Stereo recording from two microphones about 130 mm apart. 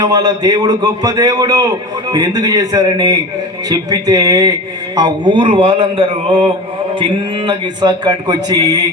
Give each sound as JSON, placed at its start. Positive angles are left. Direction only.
{"t": 0.0, "sound": "a man's voice", "side_deg": -30}